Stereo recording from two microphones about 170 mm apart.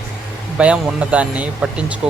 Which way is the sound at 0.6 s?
5° right (ahead or behind).